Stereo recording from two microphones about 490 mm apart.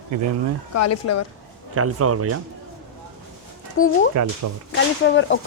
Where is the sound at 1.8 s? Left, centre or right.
Right.